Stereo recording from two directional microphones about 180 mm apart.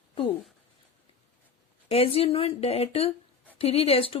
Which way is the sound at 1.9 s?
35° left (ahead or behind).